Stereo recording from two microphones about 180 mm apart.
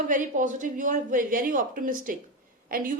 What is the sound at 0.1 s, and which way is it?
Speech, 45° right (ahead or behind).